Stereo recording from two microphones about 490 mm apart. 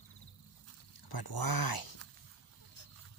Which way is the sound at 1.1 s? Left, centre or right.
Left.